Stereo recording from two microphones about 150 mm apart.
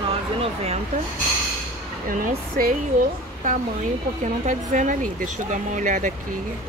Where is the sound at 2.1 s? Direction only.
70° right (ahead or behind).